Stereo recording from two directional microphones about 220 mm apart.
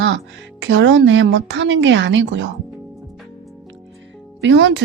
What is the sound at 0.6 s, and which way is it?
A woman's voice, 55° right (ahead or behind).